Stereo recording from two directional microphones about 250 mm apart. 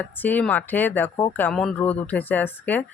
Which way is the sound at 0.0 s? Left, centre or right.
Centre.